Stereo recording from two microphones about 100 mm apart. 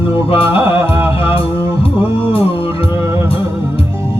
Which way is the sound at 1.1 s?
65° left (ahead or behind).